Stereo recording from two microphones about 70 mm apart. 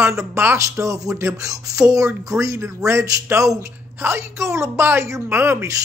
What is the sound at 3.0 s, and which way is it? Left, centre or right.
Speech, right.